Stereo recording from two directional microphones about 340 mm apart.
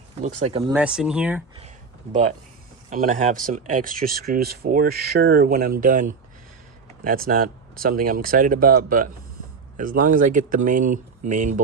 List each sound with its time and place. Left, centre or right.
0.2 s speech: centre
0.7 s speech: centre
2.9 s speech: right